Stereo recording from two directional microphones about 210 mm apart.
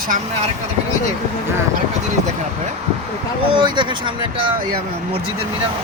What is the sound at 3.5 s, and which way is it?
Speech, 20° right (ahead or behind).